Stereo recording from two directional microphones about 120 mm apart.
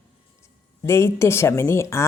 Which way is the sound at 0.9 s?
20° left (ahead or behind).